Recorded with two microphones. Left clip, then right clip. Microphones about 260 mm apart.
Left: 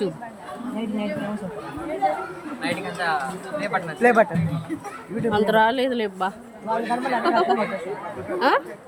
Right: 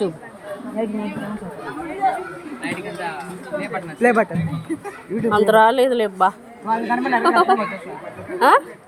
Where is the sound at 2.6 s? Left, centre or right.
Centre.